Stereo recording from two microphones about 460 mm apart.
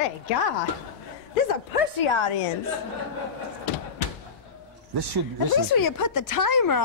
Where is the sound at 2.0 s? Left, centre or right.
Left.